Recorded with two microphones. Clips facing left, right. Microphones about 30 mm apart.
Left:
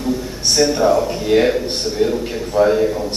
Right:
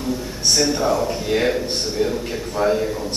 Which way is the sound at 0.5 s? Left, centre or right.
Centre.